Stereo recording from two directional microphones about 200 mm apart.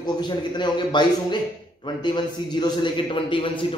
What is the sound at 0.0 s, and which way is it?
A man's voice, 20° left (ahead or behind).